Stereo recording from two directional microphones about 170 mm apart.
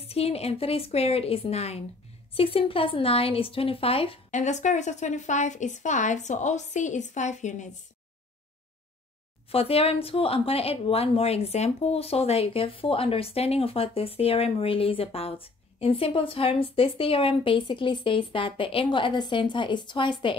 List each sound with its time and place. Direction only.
0.1 s speech: 35° left (ahead or behind)
4.4 s a woman's voice: 45° left (ahead or behind)
9.5 s speech: 35° left (ahead or behind)